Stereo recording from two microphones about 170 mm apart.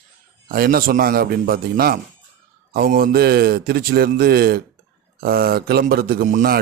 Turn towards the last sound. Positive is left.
turn(degrees=-50)  # may be behind; listen again after turning